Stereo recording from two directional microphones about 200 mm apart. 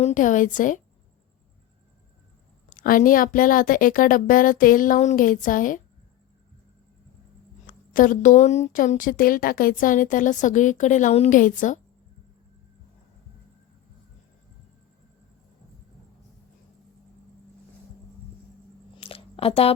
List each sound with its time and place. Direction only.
0.0 s speech: 40° left (ahead or behind)
2.6 s a woman's voice: 45° left (ahead or behind)
7.7 s speech: 40° left (ahead or behind)
18.9 s a sound: 30° left (ahead or behind)